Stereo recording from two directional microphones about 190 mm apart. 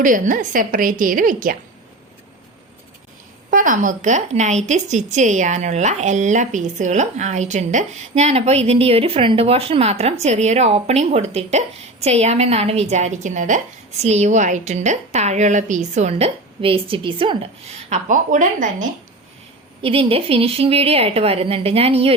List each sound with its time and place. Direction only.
0.0 s a woman's voice: 45° right (ahead or behind)
3.5 s a woman's voice: 45° right (ahead or behind)
19.8 s a woman's voice: 30° right (ahead or behind)